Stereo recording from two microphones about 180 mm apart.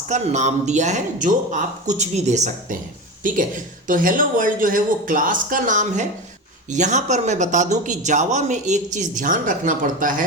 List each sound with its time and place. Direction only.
0.1 s speech: 40° right (ahead or behind)
3.8 s speech: 50° right (ahead or behind)